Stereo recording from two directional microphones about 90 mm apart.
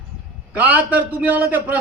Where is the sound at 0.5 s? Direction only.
20° right (ahead or behind).